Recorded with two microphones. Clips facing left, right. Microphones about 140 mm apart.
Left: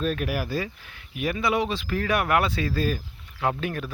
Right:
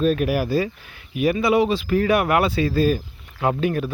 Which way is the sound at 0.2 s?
15° right (ahead or behind).